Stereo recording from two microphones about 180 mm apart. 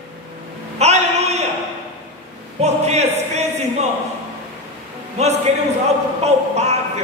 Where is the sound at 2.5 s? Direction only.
35° right (ahead or behind).